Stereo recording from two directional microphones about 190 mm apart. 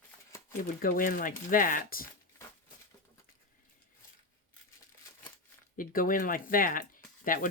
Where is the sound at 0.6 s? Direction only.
45° left (ahead or behind).